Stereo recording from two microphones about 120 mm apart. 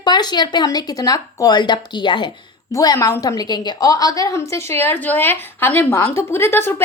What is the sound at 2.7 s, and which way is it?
A woman's voice, 30° left (ahead or behind).